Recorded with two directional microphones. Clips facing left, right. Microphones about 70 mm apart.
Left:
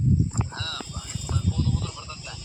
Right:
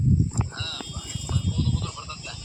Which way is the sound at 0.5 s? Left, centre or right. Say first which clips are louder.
Left 2 dB; left.